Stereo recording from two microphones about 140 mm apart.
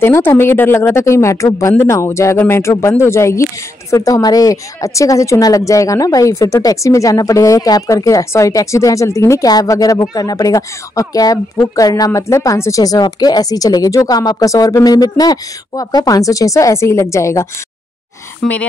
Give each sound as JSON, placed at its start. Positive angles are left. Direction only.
{"t": 0.0, "sound": "a woman's voice", "side_deg": 15}